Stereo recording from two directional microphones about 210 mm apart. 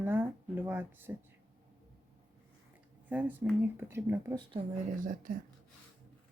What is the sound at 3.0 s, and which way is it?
Speech, 10° right (ahead or behind).